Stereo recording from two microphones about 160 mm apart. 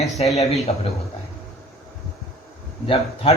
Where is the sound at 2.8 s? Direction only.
35° left (ahead or behind).